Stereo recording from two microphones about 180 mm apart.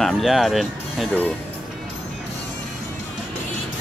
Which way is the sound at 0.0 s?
Centre (ahead or behind).